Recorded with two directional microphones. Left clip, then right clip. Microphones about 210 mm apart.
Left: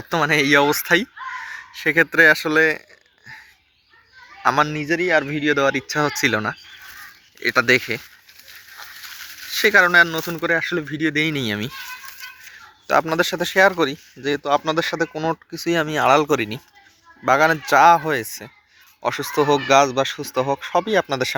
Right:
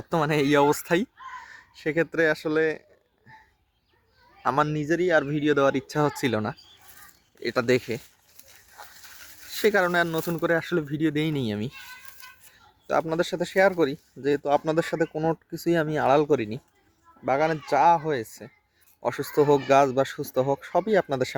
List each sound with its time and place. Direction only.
0.1 s speech: 15° right (ahead or behind)
1.5 s crow: 10° right (ahead or behind)
2.1 s speech: 5° right (ahead or behind)
4.4 s speech: 15° right (ahead or behind)
8.8 s a sound: 10° left (ahead or behind)
9.6 s speech: 15° right (ahead or behind)
12.9 s speech: centre (ahead or behind)
19.0 s speech: 20° right (ahead or behind)